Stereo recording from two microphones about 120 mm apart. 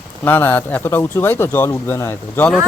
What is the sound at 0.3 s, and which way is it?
Speech, 15° left (ahead or behind).